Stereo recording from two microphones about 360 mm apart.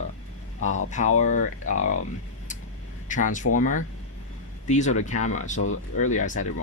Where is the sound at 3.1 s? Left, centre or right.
Left.